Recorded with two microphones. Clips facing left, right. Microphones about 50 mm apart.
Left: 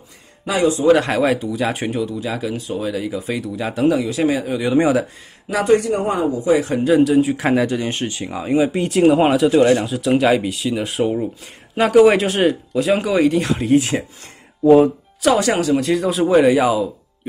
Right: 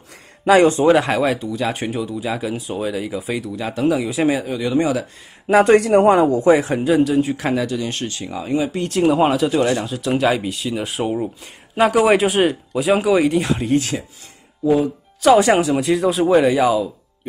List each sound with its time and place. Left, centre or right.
0.5 s speech: right
0.9 s speech: centre
4.0 s speech: centre
4.5 s speech: centre
5.6 s speech: right
6.8 s speech: centre
7.5 s speech: left; by 9.5 s centre
9.5 s speech: centre
9.8 s speech: centre
14.6 s speech: left
15.3 s speech: centre
15.8 s speech: centre